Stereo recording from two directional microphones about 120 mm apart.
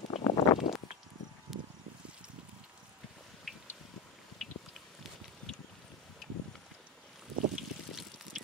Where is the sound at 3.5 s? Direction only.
Centre (ahead or behind).